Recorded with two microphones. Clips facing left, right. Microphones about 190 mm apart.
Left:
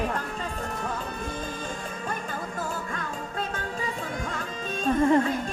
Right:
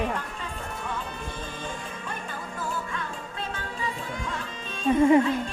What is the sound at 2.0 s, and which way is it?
Music, 45° left (ahead or behind).